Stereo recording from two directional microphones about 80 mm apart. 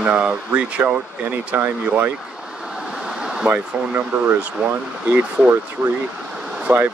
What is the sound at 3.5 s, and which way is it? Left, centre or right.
Speech, right.